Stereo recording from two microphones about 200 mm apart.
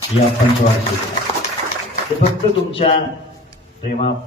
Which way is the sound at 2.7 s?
30° left (ahead or behind).